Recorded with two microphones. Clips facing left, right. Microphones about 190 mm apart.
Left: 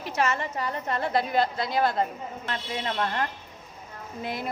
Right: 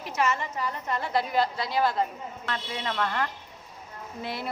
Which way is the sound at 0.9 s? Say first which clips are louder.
Left 2 dB; 55° left (ahead or behind).